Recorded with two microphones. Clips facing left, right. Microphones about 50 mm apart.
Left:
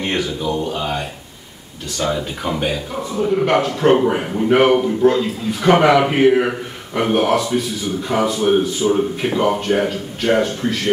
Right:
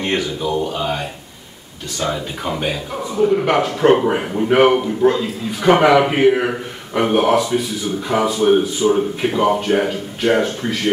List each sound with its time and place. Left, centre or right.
0.0 s a man's voice: centre